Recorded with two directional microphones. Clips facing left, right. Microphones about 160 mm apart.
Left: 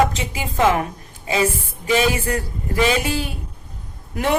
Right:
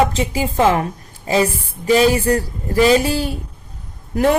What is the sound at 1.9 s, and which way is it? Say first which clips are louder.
Speech: right 5 dB; 35° right (ahead or behind).